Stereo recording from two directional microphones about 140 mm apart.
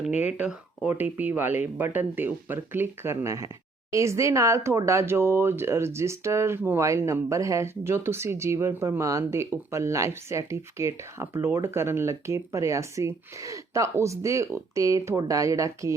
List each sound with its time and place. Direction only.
0.2 s speech: 10° right (ahead or behind)